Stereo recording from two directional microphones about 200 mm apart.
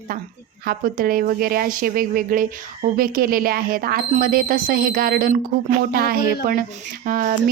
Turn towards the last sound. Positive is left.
turn(degrees=-45)  # may be behind; listen again after turning